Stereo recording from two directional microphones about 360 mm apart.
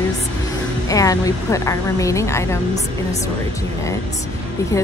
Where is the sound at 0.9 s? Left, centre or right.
Centre.